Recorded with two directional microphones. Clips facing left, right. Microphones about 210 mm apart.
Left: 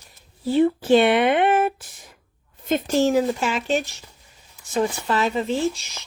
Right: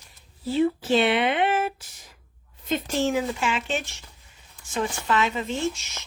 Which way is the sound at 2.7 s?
40° left (ahead or behind).